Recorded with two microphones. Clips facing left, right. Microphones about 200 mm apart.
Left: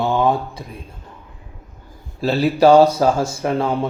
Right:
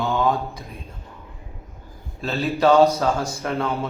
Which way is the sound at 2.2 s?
35° left (ahead or behind).